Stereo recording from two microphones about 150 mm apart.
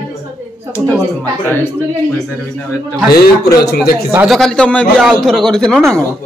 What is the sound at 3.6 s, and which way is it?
Speech, 90° left.